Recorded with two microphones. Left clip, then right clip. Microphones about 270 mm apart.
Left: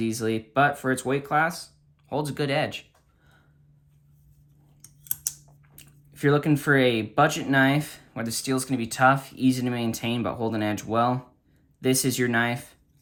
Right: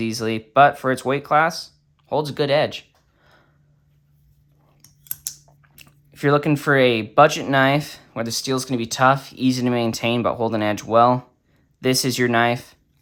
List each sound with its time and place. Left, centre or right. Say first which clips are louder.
0.0 s speech: right 3 dB; centre
5.7 s speech: right 5 dB; centre